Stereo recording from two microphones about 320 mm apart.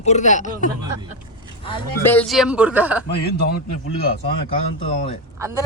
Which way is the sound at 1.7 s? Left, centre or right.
Centre.